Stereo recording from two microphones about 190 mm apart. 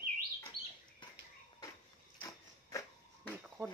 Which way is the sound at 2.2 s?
20° left (ahead or behind).